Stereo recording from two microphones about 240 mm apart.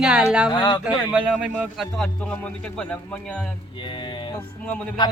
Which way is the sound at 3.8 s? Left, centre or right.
Centre.